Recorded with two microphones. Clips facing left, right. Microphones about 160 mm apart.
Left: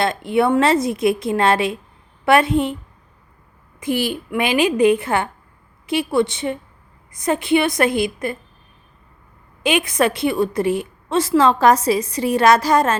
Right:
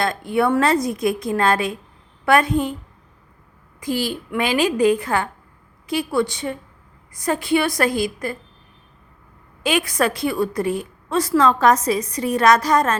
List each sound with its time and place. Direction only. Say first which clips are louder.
0.3 s a woman's voice: left 2 dB; 25° left (ahead or behind)
3.8 s a woman's voice: left 2 dB; 20° left (ahead or behind)
9.6 s a woman's voice: left 2 dB; 20° left (ahead or behind)